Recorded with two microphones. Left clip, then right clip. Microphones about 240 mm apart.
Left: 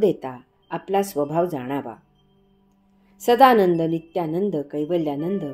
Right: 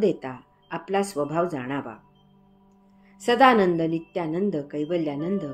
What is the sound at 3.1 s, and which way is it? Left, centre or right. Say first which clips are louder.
A woman's voice: left 3 dB; left.